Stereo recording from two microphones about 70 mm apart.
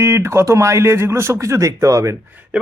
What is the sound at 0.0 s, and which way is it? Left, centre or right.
Speech, right.